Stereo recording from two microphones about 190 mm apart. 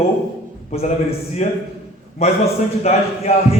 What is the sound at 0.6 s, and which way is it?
A man's voice, 35° left (ahead or behind).